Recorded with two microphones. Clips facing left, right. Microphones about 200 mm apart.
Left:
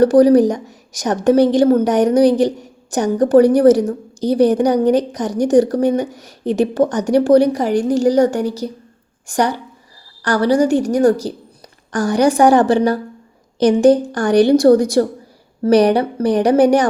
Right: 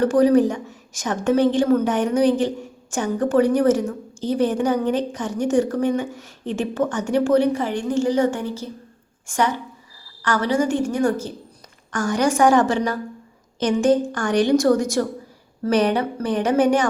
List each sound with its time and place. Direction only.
0.0 s a woman's voice: 40° left (ahead or behind)